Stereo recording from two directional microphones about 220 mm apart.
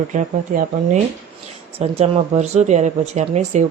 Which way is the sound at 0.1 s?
35° right (ahead or behind).